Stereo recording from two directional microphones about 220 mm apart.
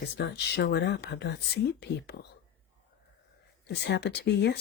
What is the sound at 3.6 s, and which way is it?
Speech, 50° left (ahead or behind).